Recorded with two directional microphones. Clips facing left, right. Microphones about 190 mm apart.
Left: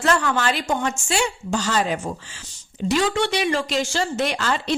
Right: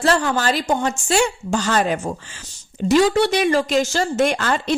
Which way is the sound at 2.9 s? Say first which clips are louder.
Right 6 dB; 40° right (ahead or behind).